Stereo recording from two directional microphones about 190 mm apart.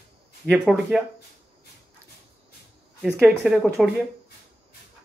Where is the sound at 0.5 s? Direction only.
Centre (ahead or behind).